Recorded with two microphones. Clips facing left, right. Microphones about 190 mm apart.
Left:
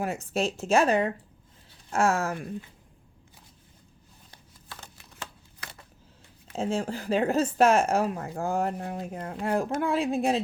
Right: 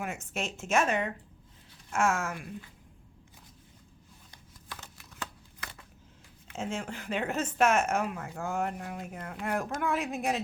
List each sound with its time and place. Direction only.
0.0 s speech: 35° left (ahead or behind)
4.7 s shuffling cards: 25° left (ahead or behind)
6.5 s speech: 35° left (ahead or behind)